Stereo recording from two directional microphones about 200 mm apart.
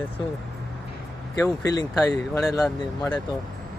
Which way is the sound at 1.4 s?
15° left (ahead or behind).